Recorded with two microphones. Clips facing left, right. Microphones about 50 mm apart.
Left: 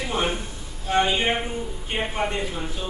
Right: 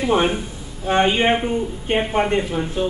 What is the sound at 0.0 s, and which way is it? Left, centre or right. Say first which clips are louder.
A man's voice: right 7 dB; right.